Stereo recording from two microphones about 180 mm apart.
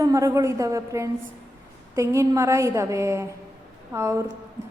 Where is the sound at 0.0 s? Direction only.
15° right (ahead or behind).